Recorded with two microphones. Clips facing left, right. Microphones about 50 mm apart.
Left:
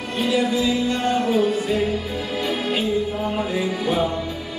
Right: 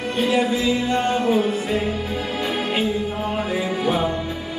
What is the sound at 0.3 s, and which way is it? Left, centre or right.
Music, right.